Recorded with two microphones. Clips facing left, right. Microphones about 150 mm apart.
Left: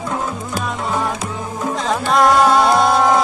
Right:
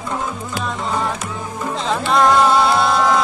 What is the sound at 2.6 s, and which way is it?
Music, 45° left (ahead or behind).